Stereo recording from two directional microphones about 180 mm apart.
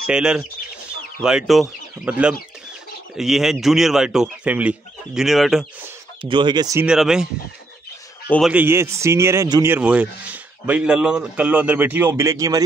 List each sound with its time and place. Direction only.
0.0 s speech: 5° right (ahead or behind)
6.2 s speech: 25° right (ahead or behind)
6.9 s speech: 5° right (ahead or behind)
8.3 s speech: centre (ahead or behind); by 12.6 s 20° right (ahead or behind)